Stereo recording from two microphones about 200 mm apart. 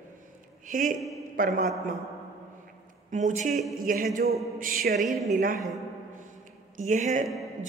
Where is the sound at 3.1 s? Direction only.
35° right (ahead or behind).